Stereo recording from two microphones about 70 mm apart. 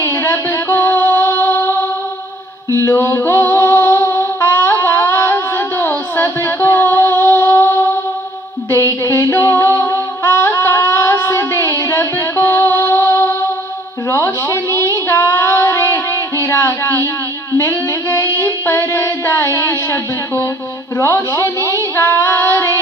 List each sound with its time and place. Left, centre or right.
0.0 s music: left
2.7 s music: left
8.7 s humming: left
14.1 s child singing: left
16.4 s a sound: left
17.6 s humming: left
18.3 s a sound: left
21.9 s child singing: left